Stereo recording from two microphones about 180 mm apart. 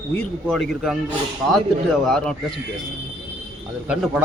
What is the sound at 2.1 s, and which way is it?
Speech, 5° left (ahead or behind).